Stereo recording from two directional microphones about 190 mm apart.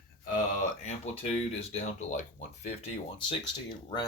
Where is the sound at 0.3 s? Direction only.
40° left (ahead or behind).